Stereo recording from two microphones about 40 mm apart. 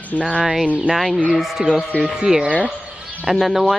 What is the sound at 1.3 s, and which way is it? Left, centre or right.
Speech, centre.